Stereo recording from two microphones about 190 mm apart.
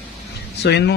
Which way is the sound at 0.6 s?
60° left (ahead or behind).